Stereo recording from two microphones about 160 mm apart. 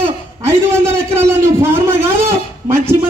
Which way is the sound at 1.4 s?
15° right (ahead or behind).